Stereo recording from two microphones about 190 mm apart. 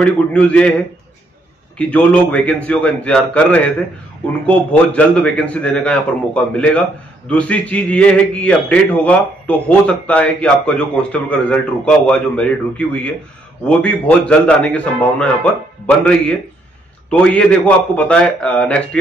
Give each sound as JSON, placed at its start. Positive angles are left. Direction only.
{"t": 0.0, "sound": "a man's voice", "side_deg": 5}